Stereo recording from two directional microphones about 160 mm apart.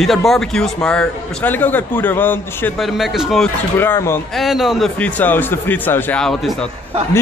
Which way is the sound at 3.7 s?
15° left (ahead or behind).